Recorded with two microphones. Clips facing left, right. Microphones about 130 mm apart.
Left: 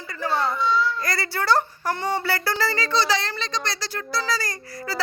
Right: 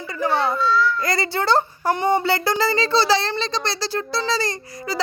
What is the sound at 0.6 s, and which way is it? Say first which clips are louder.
Babbling: right 3 dB; 20° left (ahead or behind).